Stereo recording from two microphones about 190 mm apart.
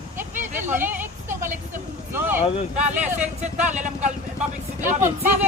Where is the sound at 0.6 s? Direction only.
10° right (ahead or behind).